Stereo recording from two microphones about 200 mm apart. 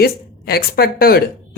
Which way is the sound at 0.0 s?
50° left (ahead or behind).